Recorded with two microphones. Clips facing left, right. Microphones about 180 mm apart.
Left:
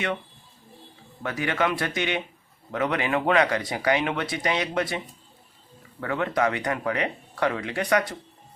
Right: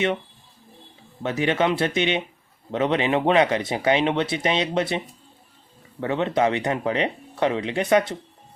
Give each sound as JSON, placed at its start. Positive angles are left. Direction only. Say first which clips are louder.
{"t": 1.2, "sound": "speech", "louder": "right 4 dB", "side_deg": -25}